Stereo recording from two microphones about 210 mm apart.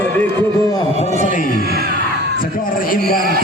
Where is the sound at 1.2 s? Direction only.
40° left (ahead or behind).